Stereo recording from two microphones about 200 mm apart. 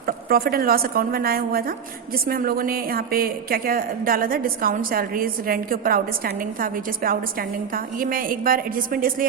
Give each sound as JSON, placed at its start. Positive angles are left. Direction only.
{"t": 0.0, "sound": "a woman's voice", "side_deg": -50}